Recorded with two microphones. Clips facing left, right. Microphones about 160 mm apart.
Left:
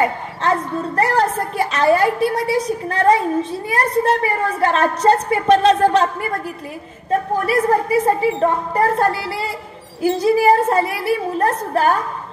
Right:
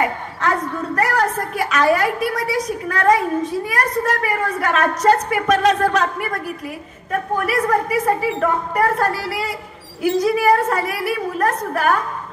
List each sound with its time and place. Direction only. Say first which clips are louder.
0.4 s a woman's voice: left 2 dB; 30° left (ahead or behind)